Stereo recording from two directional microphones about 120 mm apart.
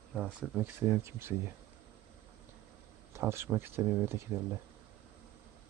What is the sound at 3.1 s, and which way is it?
Speech, 20° right (ahead or behind).